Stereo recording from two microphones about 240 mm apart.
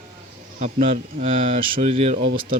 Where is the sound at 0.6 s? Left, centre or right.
Right.